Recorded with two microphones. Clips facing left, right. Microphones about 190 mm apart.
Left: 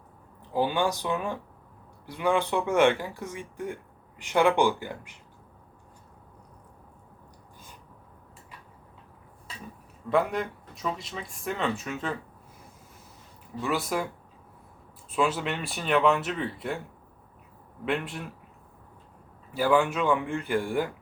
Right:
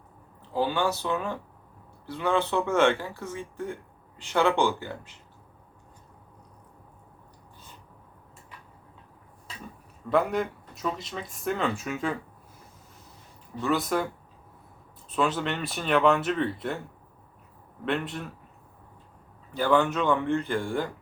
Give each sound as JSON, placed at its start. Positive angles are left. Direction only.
{"t": 0.5, "sound": "speech", "side_deg": 15}
{"t": 10.1, "sound": "speech", "side_deg": 0}
{"t": 13.6, "sound": "speech", "side_deg": 5}
{"t": 15.1, "sound": "speech", "side_deg": 5}
{"t": 17.8, "sound": "speech", "side_deg": 5}
{"t": 19.5, "sound": "speech", "side_deg": 5}